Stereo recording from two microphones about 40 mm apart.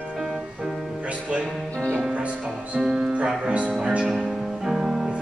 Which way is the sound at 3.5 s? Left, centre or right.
Right.